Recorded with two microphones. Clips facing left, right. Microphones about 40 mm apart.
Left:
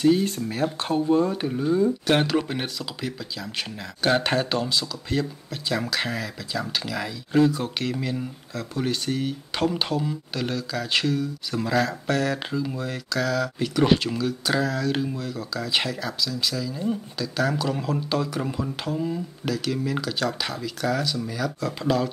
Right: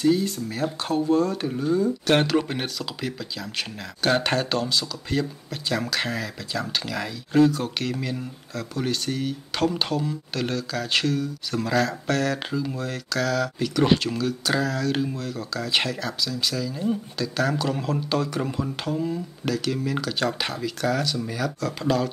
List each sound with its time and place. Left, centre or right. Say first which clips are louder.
0.0 s speech: left 1 dB; left
0.8 s speech: even; centre
21.5 s speech: even; centre
21.8 s speech: even; centre